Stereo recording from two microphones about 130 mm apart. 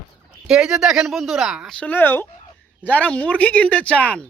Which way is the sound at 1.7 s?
10° left (ahead or behind).